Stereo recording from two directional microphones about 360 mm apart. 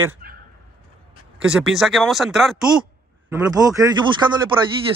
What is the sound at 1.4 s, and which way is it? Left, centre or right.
Speech, centre.